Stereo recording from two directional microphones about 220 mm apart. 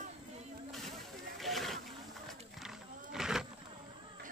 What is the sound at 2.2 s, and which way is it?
Roaring cats, centre (ahead or behind).